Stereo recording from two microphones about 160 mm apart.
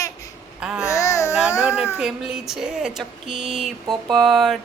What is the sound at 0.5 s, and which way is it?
Babbling, 5° right (ahead or behind).